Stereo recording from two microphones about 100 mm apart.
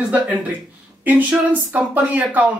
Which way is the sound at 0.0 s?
10° right (ahead or behind).